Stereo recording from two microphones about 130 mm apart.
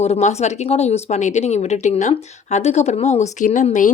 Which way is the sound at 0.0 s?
60° left (ahead or behind).